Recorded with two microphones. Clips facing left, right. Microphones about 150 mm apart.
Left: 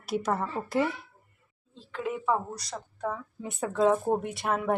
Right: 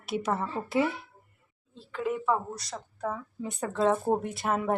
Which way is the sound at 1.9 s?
Centre (ahead or behind).